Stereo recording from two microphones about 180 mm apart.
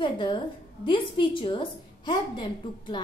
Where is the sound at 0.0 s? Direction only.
25° left (ahead or behind).